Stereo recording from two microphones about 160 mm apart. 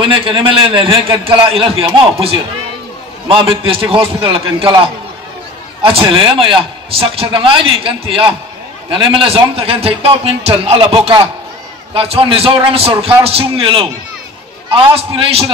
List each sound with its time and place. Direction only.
0.1 s a man's voice: 30° right (ahead or behind)